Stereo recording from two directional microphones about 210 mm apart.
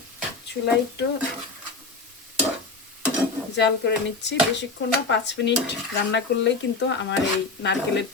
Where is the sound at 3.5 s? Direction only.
55° left (ahead or behind).